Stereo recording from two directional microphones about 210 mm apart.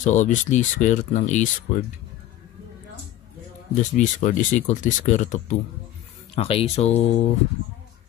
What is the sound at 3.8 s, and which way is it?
Speech, 35° left (ahead or behind).